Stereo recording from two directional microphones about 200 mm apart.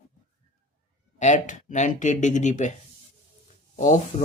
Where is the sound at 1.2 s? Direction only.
35° left (ahead or behind).